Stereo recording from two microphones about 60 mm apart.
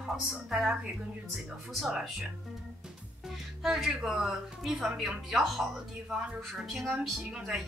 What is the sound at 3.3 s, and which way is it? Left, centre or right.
Speech, centre.